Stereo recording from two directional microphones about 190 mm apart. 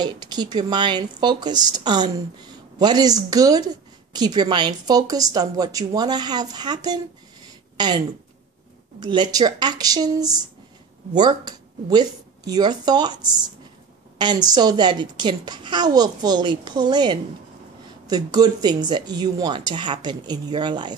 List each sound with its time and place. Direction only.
0.0 s speech: 20° right (ahead or behind)
9.0 s speech: 25° right (ahead or behind)